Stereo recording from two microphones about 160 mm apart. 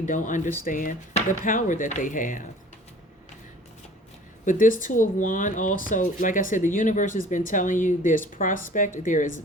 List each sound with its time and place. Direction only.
0.0 s speech: 50° left (ahead or behind)
4.4 s speech: 55° left (ahead or behind)